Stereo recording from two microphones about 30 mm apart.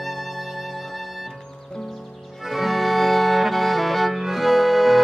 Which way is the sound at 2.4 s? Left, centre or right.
Centre.